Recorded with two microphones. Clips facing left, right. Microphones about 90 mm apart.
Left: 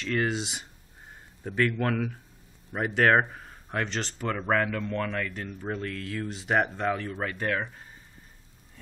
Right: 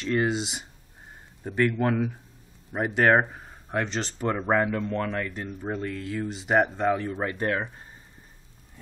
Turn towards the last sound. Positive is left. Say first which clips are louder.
# right 2 dB
turn(degrees=-20)  # may be behind; listen again after turning